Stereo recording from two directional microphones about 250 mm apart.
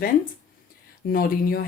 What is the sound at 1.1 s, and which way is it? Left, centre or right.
Speech, left.